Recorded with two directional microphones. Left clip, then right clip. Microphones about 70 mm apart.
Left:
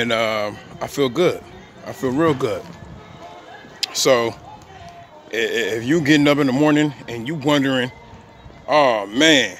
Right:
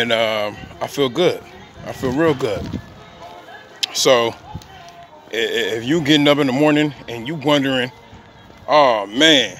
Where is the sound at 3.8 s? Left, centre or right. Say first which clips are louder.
Right 2 dB; centre.